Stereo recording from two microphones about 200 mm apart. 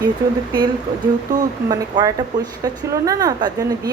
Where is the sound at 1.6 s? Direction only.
20° right (ahead or behind).